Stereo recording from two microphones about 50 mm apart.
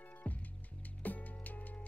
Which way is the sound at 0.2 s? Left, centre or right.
Left.